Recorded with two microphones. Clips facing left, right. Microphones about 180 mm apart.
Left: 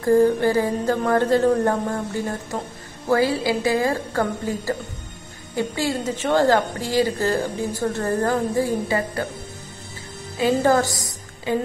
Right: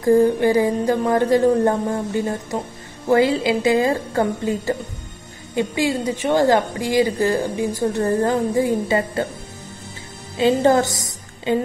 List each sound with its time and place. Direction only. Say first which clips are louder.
0.0 s a woman's voice: right 2 dB; 15° right (ahead or behind)
10.3 s a woman's voice: right 3 dB; 25° right (ahead or behind)